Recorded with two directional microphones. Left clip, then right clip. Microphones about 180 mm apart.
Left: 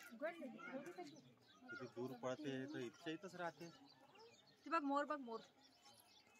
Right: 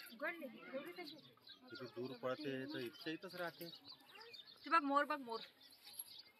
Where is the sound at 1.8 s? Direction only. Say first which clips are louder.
Right 3 dB; 40° right (ahead or behind).